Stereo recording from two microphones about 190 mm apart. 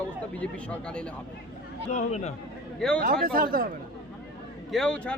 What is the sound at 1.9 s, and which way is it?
Speech, 40° left (ahead or behind).